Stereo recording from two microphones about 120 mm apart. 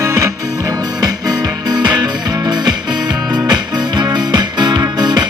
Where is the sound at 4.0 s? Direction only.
35° right (ahead or behind).